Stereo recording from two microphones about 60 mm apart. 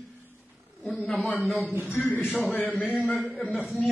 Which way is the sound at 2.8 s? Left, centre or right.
Centre.